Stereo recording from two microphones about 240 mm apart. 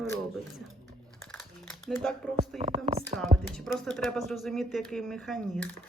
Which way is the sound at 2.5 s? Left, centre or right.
Right.